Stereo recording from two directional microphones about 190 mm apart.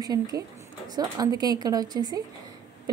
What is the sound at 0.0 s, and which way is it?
A woman's voice, 20° right (ahead or behind).